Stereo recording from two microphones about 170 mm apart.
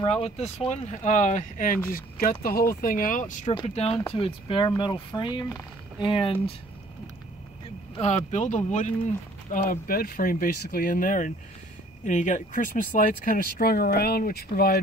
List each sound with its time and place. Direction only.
0.0 s speech: 35° left (ahead or behind)
3.5 s speech: 35° left (ahead or behind)
7.9 s speech: 40° left (ahead or behind); by 14.8 s 65° left (ahead or behind)